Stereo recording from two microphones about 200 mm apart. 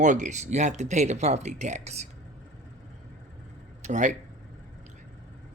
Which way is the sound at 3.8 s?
40° right (ahead or behind).